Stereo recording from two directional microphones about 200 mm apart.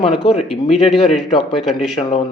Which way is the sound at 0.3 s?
30° left (ahead or behind).